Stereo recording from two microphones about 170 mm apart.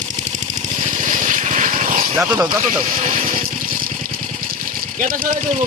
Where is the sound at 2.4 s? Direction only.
20° right (ahead or behind).